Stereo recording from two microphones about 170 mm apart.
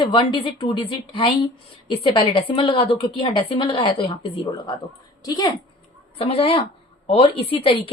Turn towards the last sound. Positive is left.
turn(degrees=35)  # may be behind; listen again after turning